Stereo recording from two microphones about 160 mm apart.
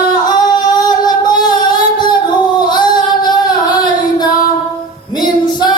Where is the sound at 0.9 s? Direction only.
25° left (ahead or behind).